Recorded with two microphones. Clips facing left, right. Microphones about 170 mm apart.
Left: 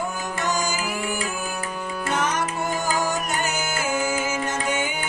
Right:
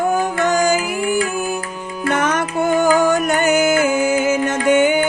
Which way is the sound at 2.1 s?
60° right (ahead or behind).